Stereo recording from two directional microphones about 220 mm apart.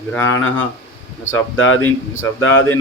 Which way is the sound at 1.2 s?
65° left (ahead or behind).